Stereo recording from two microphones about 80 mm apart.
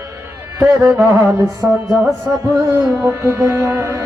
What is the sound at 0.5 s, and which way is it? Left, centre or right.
Speech, right.